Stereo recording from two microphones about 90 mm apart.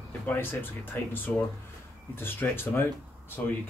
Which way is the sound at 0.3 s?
25° left (ahead or behind).